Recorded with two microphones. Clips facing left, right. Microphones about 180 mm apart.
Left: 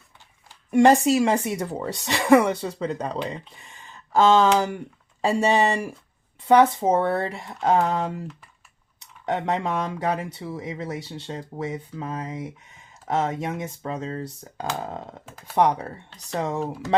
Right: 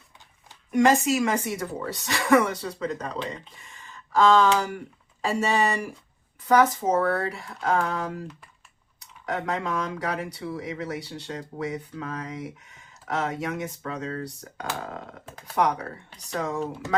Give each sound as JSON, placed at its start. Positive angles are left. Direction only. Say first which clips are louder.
{"t": 0.7, "sound": "speech", "louder": "left 4 dB", "side_deg": 30}
{"t": 3.6, "sound": "a sound", "louder": "left 1 dB", "side_deg": 35}
{"t": 5.2, "sound": "speech", "louder": "left 4 dB", "side_deg": 35}
{"t": 9.2, "sound": "speech", "louder": "left 4 dB", "side_deg": 25}